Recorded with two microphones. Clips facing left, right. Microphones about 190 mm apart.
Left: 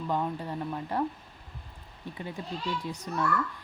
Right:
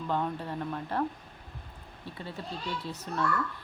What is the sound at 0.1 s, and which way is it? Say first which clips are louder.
Speech: even; 10° left (ahead or behind).